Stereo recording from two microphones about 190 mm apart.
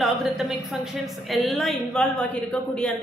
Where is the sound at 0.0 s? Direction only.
Centre (ahead or behind).